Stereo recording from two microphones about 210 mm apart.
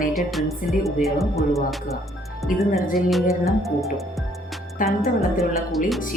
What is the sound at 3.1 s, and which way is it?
Speech, centre (ahead or behind).